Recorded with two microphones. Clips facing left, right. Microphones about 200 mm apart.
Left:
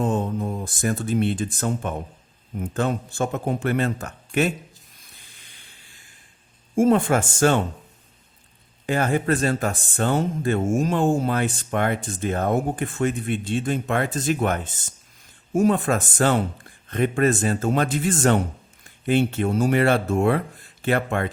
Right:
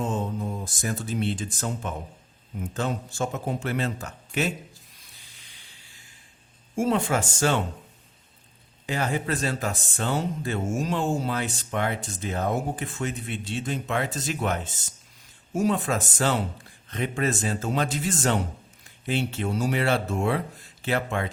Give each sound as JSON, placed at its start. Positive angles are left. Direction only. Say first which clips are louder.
{"t": 0.0, "sound": "speech", "louder": "left 5 dB", "side_deg": 55}
{"t": 6.7, "sound": "speech", "louder": "left 6 dB", "side_deg": 50}
{"t": 8.9, "sound": "speech", "louder": "left 6 dB", "side_deg": 50}